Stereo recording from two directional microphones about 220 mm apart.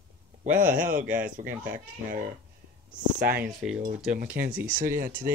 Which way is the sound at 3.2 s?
5° right (ahead or behind).